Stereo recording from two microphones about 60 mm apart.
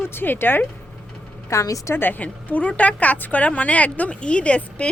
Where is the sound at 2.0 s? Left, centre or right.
Left.